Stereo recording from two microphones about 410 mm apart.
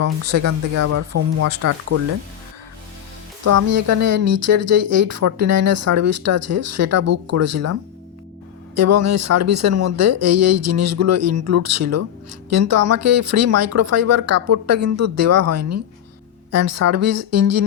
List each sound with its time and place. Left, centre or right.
0.0 s speech: right
3.4 s speech: right